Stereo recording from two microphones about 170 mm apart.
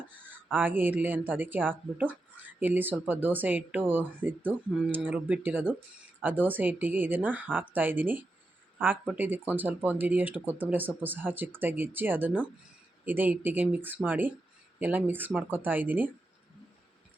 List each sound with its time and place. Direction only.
0.1 s speech: 10° right (ahead or behind)